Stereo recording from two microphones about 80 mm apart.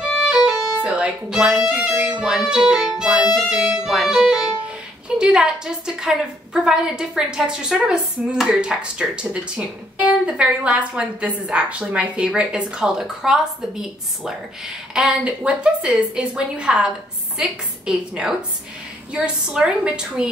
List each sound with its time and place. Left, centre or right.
0.1 s a woman's voice: centre